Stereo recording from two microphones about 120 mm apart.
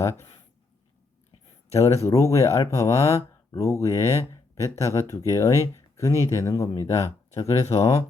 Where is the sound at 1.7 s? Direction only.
25° left (ahead or behind).